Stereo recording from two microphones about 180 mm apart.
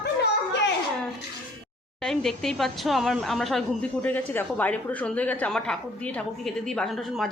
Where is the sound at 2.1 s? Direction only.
Centre (ahead or behind).